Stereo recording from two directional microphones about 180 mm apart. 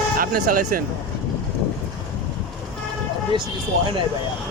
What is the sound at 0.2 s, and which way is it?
Speech, 50° right (ahead or behind).